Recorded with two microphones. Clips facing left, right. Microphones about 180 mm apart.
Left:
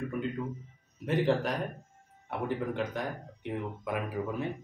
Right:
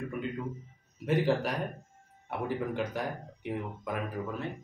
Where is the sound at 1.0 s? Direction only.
Centre (ahead or behind).